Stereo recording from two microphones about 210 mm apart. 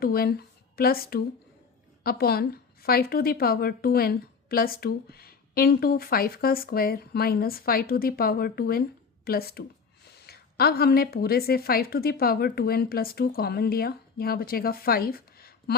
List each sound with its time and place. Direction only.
0.0 s a woman's voice: 45° left (ahead or behind)